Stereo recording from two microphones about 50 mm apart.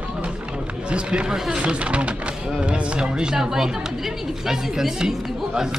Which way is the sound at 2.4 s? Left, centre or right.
Centre.